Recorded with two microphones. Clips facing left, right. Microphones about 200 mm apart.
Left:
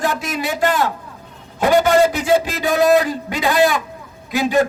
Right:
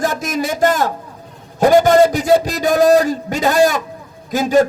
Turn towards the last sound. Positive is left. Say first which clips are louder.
# right 3 dB
turn(degrees=-45)  # may be behind; listen again after turning